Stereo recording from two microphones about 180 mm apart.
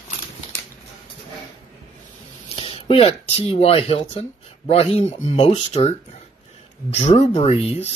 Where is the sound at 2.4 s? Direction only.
30° left (ahead or behind).